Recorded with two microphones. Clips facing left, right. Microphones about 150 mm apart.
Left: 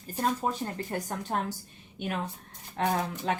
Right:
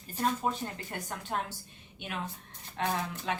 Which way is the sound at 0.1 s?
35° left (ahead or behind).